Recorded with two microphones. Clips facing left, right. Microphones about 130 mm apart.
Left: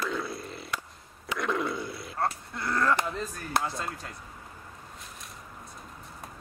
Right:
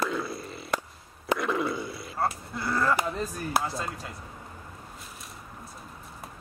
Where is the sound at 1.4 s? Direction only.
Centre (ahead or behind).